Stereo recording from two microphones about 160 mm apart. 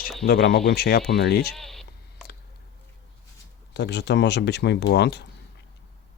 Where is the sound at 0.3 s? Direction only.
90° left.